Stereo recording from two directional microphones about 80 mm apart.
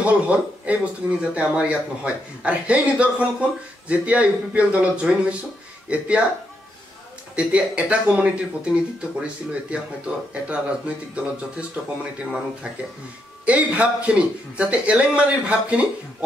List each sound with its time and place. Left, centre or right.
0.0 s a man's voice: centre
7.3 s speech: centre
13.5 s speech: centre